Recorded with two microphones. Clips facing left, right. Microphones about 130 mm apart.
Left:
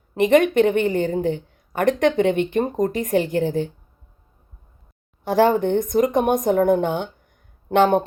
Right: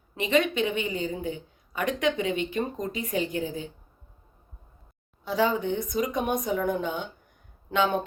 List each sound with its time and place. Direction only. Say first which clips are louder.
0.2 s a woman's voice: left 9 dB; 55° left (ahead or behind)
5.2 s speech: left 8 dB; 60° left (ahead or behind)